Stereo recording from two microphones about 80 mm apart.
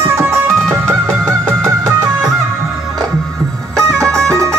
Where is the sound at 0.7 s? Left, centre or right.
Right.